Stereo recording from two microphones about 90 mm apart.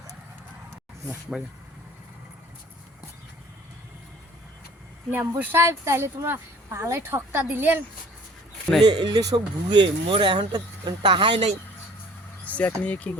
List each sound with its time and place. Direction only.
1.3 s speech: 15° right (ahead or behind)
5.4 s speech: 25° right (ahead or behind)
8.8 s speech: 60° right (ahead or behind)
10.5 s speech: 60° right (ahead or behind)
12.5 s speech: 15° left (ahead or behind)